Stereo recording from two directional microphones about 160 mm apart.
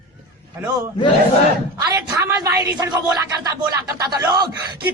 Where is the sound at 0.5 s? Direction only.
20° right (ahead or behind).